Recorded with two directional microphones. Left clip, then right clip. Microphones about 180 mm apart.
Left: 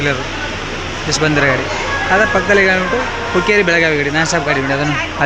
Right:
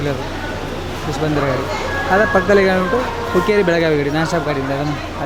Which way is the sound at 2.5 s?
20° right (ahead or behind).